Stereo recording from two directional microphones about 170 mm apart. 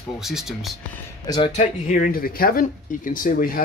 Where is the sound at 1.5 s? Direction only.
50° left (ahead or behind).